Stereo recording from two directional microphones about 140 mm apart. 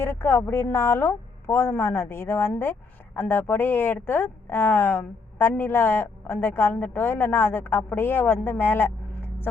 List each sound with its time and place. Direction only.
0.0 s speech: 15° left (ahead or behind)